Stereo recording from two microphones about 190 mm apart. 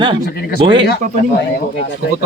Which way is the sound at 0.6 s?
25° right (ahead or behind).